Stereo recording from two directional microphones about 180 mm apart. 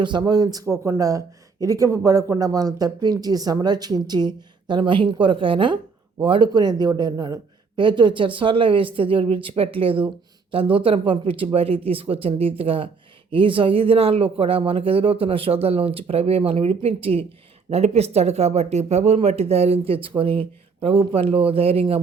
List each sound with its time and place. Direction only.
0.0 s speech: 25° right (ahead or behind)